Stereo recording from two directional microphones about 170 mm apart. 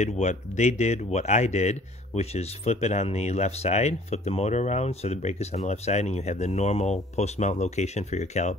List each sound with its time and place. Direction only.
0.0 s speech: 45° left (ahead or behind)